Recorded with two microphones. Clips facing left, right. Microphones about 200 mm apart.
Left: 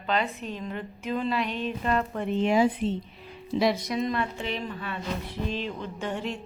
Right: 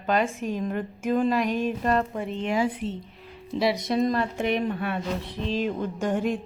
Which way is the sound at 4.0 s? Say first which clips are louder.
Right 4 dB; 40° right (ahead or behind).